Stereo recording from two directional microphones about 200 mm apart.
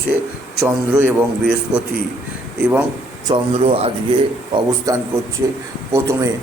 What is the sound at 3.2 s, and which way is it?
A man's voice, 25° right (ahead or behind).